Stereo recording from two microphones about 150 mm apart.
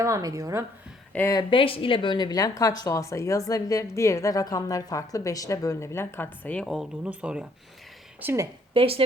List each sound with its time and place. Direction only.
0.0 s speech: 20° right (ahead or behind)
1.3 s a woman's voice: 30° left (ahead or behind); by 8.4 s 15° right (ahead or behind)
8.7 s speech: 40° right (ahead or behind)